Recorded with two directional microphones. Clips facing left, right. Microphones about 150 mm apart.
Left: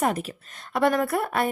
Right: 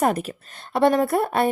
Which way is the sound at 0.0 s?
45° right (ahead or behind).